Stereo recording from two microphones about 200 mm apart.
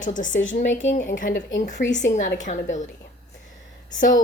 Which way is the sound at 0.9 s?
40° left (ahead or behind).